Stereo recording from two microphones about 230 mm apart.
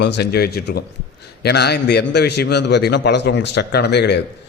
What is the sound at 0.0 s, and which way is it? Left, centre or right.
Speech, left.